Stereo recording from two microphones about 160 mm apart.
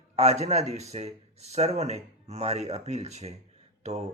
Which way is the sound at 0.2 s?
40° right (ahead or behind).